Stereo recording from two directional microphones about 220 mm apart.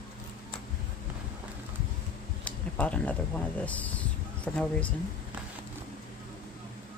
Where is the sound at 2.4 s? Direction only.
5° left (ahead or behind).